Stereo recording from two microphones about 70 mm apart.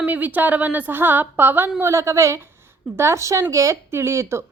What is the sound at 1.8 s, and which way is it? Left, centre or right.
A woman's voice, right.